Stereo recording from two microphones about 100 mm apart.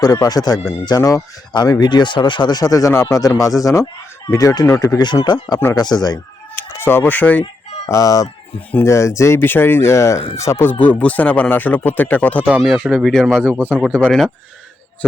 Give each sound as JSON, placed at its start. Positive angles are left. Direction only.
{"t": 0.0, "sound": "speech", "side_deg": 40}
{"t": 4.9, "sound": "speech", "side_deg": 45}
{"t": 6.6, "sound": "speech", "side_deg": 20}
{"t": 7.9, "sound": "speech", "side_deg": 30}
{"t": 12.5, "sound": "speech", "side_deg": -10}
{"t": 12.8, "sound": "speech", "side_deg": 5}
{"t": 13.4, "sound": "speech", "side_deg": 15}